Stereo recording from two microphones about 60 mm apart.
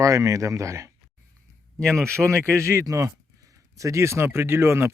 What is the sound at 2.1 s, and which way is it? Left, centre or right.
Speech, right.